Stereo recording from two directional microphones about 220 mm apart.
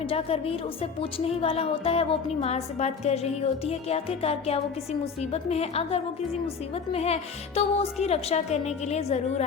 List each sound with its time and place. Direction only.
0.1 s speech: 25° left (ahead or behind)